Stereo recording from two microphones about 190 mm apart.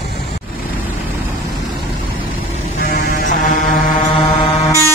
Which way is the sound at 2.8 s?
50° left (ahead or behind).